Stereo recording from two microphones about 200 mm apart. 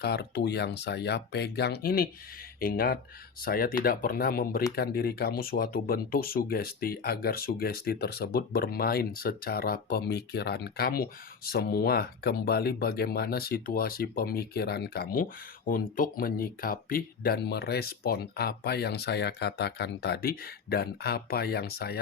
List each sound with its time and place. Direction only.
0.0 s speech: 55° left (ahead or behind)